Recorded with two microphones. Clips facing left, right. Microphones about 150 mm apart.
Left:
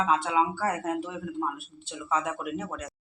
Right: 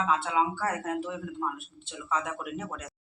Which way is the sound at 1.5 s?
10° left (ahead or behind).